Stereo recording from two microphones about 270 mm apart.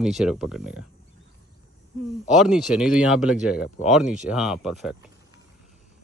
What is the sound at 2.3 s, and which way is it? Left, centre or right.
Speech, centre.